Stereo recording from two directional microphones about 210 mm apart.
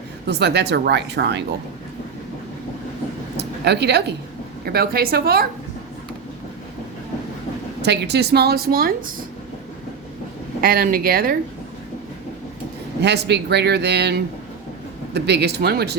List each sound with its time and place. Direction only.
0.3 s a woman's voice: 55° right (ahead or behind)
3.3 s a sound: 55° right (ahead or behind)
4.6 s a woman's voice: 45° right (ahead or behind)
7.8 s a woman's voice: 55° right (ahead or behind)
10.6 s a woman's voice: 45° right (ahead or behind)
13.0 s a woman's voice: 55° right (ahead or behind)